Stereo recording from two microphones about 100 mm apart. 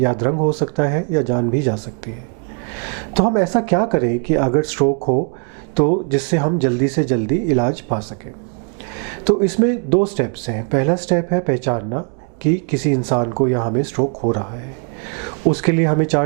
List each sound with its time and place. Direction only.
0.0 s speech: 15° right (ahead or behind)
3.2 s speech: 15° right (ahead or behind)
9.2 s speech: 15° right (ahead or behind)
15.5 s speech: 15° right (ahead or behind)